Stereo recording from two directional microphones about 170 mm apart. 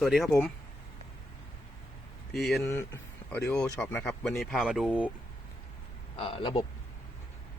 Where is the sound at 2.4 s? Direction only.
Centre (ahead or behind).